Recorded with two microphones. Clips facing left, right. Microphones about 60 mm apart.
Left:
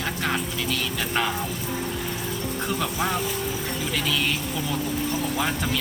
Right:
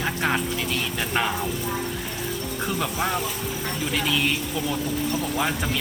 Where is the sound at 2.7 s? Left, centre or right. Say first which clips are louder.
Right 1 dB; centre.